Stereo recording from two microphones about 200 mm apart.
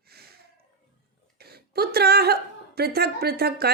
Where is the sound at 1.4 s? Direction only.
50° right (ahead or behind).